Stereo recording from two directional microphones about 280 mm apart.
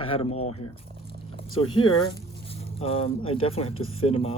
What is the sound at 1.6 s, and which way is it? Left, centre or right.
Speech, centre.